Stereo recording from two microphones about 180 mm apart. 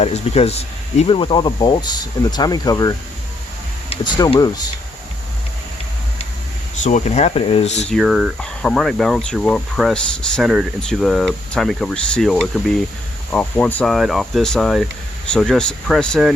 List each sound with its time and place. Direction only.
0.0 s speech: 35° left (ahead or behind)
6.8 s speech: 40° left (ahead or behind)
7.9 s speech: centre (ahead or behind)